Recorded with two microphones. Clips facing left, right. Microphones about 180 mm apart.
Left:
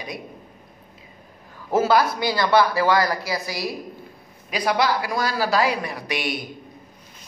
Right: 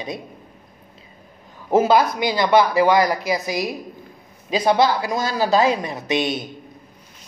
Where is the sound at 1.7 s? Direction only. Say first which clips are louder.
Right 3 dB; 20° right (ahead or behind).